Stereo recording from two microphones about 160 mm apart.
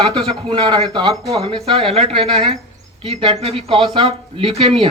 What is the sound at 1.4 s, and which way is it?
A man's voice, 35° right (ahead or behind).